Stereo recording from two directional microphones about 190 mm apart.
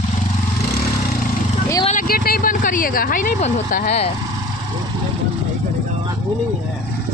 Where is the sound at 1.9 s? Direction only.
50° left (ahead or behind).